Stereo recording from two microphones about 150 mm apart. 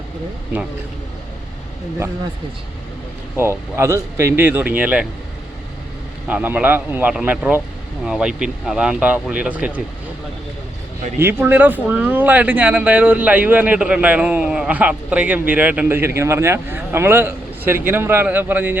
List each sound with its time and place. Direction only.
3.3 s speech: 15° right (ahead or behind)
6.2 s speech: 10° right (ahead or behind)
11.2 s speech: 15° right (ahead or behind)